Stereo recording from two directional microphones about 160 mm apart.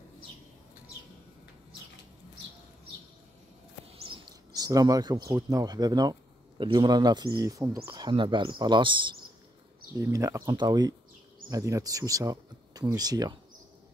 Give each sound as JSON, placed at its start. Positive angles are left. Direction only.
{"t": 3.9, "sound": "a sound", "side_deg": -30}
{"t": 4.6, "sound": "speech", "side_deg": -25}
{"t": 9.9, "sound": "speech", "side_deg": -20}